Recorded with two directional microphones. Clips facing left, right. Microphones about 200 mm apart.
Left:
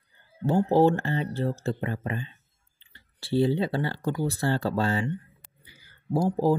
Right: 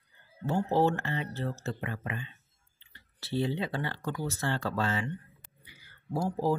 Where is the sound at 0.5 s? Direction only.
35° left (ahead or behind).